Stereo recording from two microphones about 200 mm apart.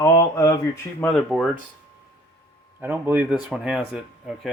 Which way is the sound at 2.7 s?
10° right (ahead or behind).